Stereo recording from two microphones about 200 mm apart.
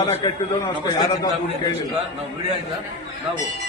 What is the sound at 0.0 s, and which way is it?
A man's voice, 15° left (ahead or behind).